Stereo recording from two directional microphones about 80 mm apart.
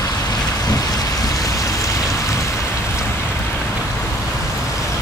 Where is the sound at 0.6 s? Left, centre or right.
Left.